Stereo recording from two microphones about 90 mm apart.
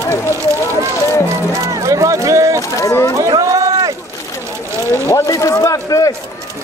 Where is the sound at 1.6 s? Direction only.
35° right (ahead or behind).